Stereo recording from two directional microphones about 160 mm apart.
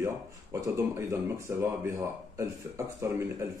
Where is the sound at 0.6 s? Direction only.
20° right (ahead or behind).